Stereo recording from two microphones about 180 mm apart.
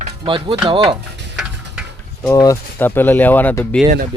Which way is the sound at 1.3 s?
5° right (ahead or behind).